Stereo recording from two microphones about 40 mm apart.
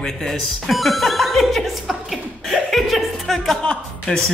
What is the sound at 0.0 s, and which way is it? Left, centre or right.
Speech, centre.